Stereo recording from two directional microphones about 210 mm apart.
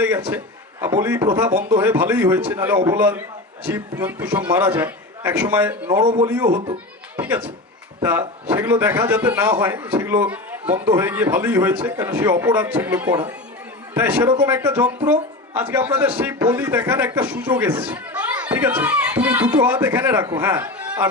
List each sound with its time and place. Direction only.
0.3 s speech: 10° right (ahead or behind)
5.9 s a man's voice: 25° right (ahead or behind)
6.2 s speech: 10° right (ahead or behind)
7.2 s a sound: 10° right (ahead or behind)
8.0 s a man's voice: 10° right (ahead or behind)